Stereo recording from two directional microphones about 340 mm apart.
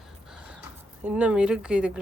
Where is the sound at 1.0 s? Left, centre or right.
Centre.